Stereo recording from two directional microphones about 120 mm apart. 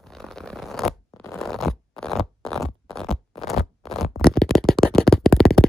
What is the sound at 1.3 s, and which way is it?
Scratch, centre (ahead or behind).